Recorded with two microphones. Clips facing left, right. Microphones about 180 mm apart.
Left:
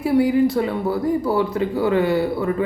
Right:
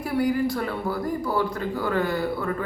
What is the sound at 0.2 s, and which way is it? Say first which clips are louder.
Speech: left 5 dB; 20° left (ahead or behind).